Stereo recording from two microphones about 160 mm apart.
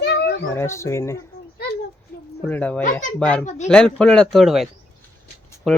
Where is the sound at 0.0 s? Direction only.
90° left.